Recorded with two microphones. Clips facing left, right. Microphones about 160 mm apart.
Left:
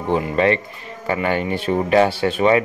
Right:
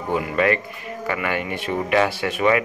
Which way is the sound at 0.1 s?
30° left (ahead or behind).